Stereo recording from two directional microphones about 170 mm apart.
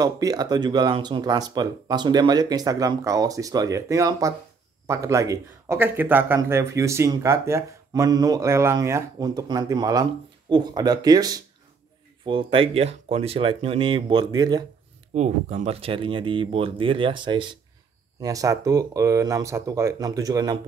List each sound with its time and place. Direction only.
0.0 s speech: 20° right (ahead or behind)
15.1 s speech: 40° right (ahead or behind); by 20.5 s 20° right (ahead or behind)